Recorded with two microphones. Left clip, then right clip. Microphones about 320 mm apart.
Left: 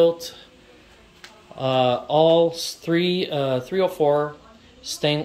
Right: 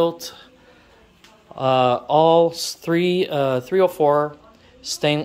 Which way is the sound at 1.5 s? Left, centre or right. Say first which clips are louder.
Right 3 dB; right.